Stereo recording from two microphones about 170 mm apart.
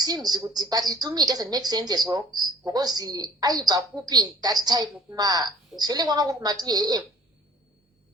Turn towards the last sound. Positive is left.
turn(degrees=-25)  # may be behind; listen again after turning